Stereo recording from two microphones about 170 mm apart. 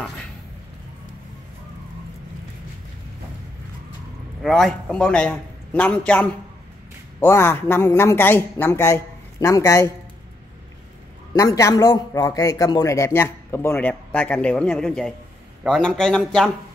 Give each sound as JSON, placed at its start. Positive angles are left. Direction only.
{"t": 4.4, "sound": "a man's voice", "side_deg": 0}
{"t": 11.3, "sound": "a man's voice", "side_deg": 20}